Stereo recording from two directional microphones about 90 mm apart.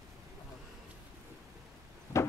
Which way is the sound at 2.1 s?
35° left (ahead or behind).